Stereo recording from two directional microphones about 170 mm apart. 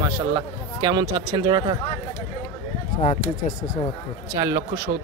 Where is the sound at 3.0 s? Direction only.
45° left (ahead or behind).